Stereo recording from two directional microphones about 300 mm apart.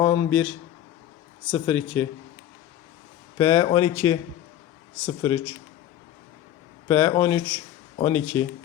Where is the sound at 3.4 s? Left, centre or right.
Centre.